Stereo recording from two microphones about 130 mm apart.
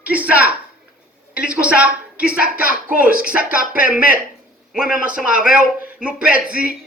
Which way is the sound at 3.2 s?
10° right (ahead or behind).